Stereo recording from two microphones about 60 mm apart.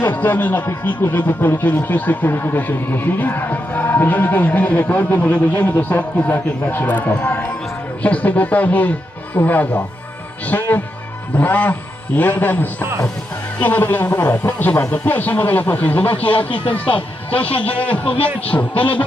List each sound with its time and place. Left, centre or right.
0.0 s speech: left
10.5 s speech: left
11.3 s speech: left
13.6 s speech: left